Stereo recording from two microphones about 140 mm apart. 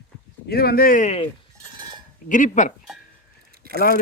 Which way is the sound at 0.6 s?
90° left.